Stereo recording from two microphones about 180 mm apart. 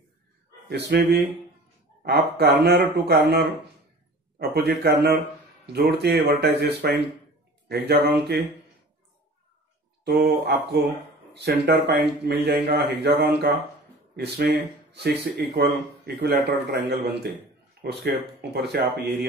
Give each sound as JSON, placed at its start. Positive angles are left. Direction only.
{"t": 0.7, "sound": "speech", "side_deg": -65}
{"t": 4.4, "sound": "speech", "side_deg": -65}
{"t": 10.0, "sound": "speech", "side_deg": -65}